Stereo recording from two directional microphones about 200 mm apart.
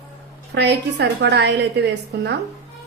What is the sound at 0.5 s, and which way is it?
A woman's voice, 60° right (ahead or behind).